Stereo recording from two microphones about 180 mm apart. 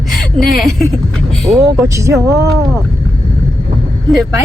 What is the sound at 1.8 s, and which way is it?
Speech, 15° right (ahead or behind).